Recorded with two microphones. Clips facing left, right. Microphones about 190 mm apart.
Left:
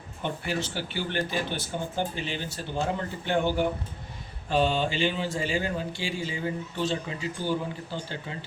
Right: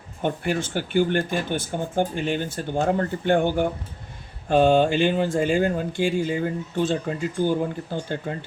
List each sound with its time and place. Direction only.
0.2 s speech: 50° right (ahead or behind)